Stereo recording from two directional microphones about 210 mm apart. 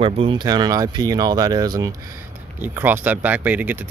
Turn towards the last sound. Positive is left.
turn(degrees=-10)  # may be behind; listen again after turning